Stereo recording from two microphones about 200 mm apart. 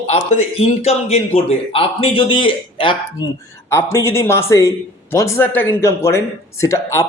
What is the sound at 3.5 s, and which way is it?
A man's voice, 15° left (ahead or behind).